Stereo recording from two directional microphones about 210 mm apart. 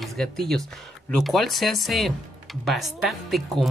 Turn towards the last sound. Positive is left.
turn(degrees=0)  # may be behind; listen again after turning